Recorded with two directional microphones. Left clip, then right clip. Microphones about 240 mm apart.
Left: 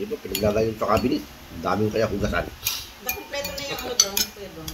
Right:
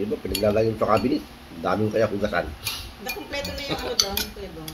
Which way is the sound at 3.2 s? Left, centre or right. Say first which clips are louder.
Right 1 dB; right.